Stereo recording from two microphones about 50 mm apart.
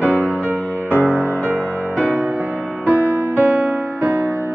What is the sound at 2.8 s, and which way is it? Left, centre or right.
Music, right.